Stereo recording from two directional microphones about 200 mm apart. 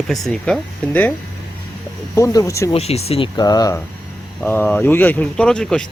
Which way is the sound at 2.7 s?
30° left (ahead or behind).